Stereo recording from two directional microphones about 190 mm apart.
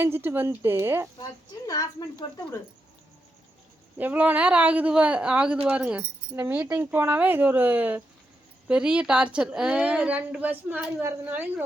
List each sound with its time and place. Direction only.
0.0 s speech: 10° right (ahead or behind)
1.6 s speech: 20° left (ahead or behind)
3.9 s speech: 10° right (ahead or behind)